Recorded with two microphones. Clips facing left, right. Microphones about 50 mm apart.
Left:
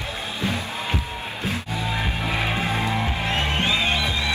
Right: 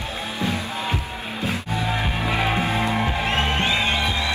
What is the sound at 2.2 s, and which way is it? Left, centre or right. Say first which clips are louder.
Music: right 3 dB; right.